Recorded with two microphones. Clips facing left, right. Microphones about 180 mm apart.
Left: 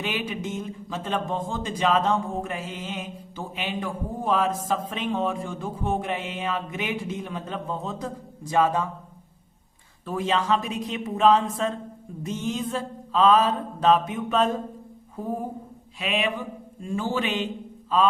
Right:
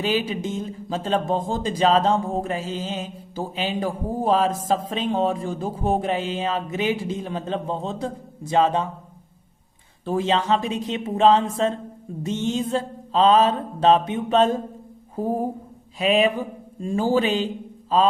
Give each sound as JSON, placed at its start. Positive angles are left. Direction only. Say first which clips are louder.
{"t": 0.0, "sound": "speech", "louder": "right 6 dB", "side_deg": -35}
{"t": 10.1, "sound": "mantra", "louder": "right 3 dB", "side_deg": -30}
{"t": 15.1, "sound": "a sound", "louder": "right 6 dB", "side_deg": -30}
{"t": 16.0, "sound": "speech", "louder": "right 8 dB", "side_deg": -40}